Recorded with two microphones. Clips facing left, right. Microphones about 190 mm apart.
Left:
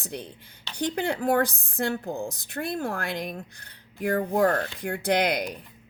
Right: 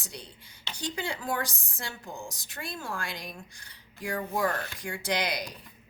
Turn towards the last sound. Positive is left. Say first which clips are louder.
# left 7 dB
turn(degrees=55)  # may be behind; listen again after turning